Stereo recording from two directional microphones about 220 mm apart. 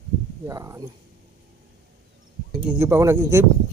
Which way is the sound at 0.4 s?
15° right (ahead or behind).